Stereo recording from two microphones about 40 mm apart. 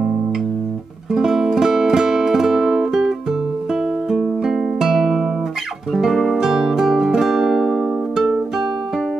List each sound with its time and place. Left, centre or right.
1.1 s music: centre